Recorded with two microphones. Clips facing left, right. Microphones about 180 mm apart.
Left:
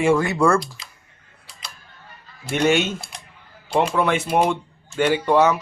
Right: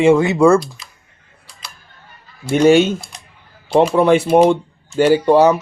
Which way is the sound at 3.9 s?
30° right (ahead or behind).